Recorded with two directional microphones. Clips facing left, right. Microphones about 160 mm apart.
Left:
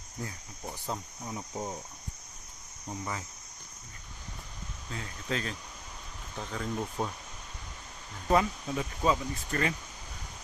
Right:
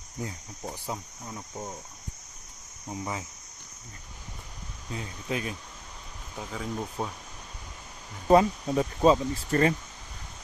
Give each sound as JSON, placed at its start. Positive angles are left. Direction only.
{"t": 0.2, "sound": "speech", "side_deg": -20}
{"t": 1.2, "sound": "cricket", "side_deg": 10}
{"t": 2.9, "sound": "speech", "side_deg": -20}
{"t": 4.9, "sound": "speech", "side_deg": -15}
{"t": 8.3, "sound": "speech", "side_deg": -30}